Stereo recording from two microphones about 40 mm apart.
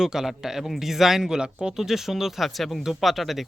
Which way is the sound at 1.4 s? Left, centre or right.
Right.